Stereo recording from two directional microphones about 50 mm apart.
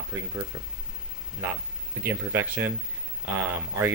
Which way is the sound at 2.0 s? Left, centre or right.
Right.